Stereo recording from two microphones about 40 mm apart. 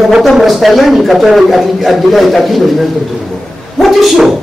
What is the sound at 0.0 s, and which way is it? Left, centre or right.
A man's voice, centre.